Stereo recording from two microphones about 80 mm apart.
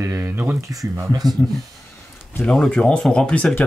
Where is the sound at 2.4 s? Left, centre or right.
Centre.